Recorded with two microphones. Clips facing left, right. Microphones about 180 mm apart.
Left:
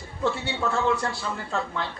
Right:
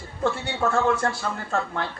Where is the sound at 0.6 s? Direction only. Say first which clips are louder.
Right 3 dB; 50° right (ahead or behind).